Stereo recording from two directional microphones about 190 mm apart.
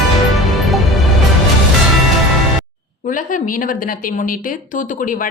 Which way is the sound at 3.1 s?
45° left (ahead or behind).